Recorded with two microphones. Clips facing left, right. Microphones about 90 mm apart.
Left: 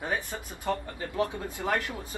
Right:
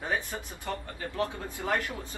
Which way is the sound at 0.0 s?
20° left (ahead or behind).